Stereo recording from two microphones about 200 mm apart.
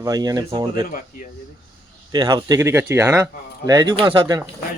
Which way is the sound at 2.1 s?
20° right (ahead or behind).